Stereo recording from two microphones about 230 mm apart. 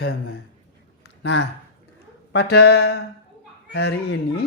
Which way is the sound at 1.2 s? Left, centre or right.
Left.